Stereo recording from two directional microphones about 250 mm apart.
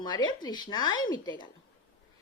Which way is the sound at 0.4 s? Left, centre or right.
Centre.